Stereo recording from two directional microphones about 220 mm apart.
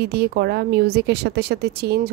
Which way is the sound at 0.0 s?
45° right (ahead or behind).